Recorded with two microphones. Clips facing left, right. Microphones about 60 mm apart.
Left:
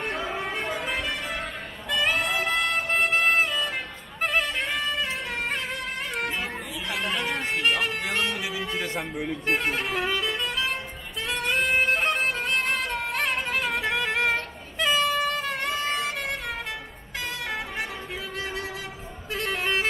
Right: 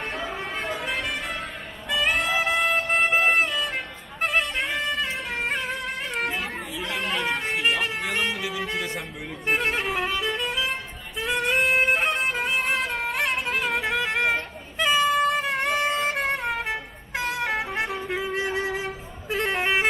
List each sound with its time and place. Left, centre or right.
0.0 s music: centre
2.1 s music: centre
6.9 s a sound: centre
7.5 s music: centre; by 18.8 s right
19.3 s vehicle: right